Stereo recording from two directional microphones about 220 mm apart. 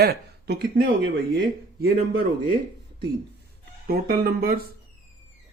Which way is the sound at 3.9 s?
45° right (ahead or behind).